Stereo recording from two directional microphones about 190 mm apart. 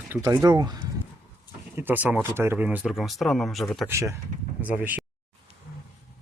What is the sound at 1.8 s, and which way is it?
Speech, 10° right (ahead or behind).